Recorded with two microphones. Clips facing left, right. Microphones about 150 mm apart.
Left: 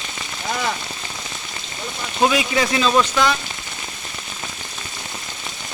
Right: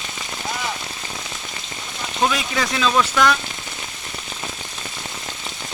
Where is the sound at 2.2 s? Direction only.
5° left (ahead or behind).